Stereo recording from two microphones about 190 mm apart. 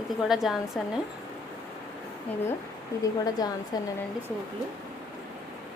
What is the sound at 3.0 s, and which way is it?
Speech, 20° left (ahead or behind).